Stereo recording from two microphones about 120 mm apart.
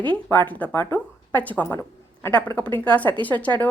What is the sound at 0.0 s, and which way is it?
A woman's voice, 15° left (ahead or behind).